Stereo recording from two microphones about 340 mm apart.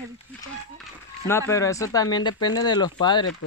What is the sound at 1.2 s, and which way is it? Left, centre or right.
Speech, centre.